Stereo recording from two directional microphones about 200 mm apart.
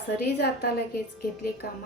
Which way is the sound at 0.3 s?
55° left (ahead or behind).